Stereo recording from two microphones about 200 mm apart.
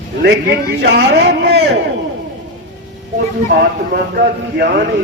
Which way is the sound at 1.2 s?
60° right (ahead or behind).